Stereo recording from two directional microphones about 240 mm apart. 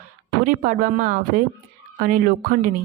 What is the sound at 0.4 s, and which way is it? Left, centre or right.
Speech, right.